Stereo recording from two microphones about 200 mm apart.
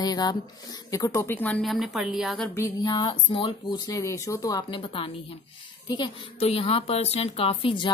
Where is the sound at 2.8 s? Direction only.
20° left (ahead or behind).